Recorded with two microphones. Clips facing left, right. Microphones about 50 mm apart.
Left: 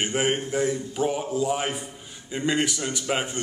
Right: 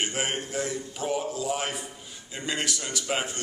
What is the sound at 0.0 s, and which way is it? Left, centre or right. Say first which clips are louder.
A man's voice: left 5 dB; centre.